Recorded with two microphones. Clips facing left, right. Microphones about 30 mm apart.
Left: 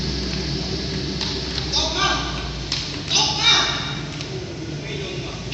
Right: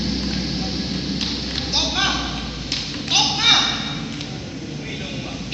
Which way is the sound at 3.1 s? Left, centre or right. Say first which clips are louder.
Right 1 dB; right.